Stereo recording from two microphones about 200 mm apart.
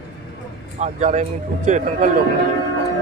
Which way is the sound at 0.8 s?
35° right (ahead or behind).